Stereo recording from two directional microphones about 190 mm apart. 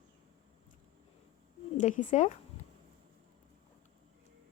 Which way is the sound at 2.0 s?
40° left (ahead or behind).